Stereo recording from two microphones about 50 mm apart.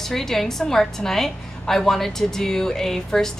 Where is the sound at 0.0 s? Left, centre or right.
Centre.